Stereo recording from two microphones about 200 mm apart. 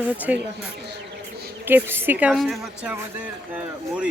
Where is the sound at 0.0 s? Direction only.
10° right (ahead or behind).